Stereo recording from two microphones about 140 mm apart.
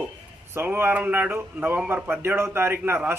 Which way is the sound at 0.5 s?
15° right (ahead or behind).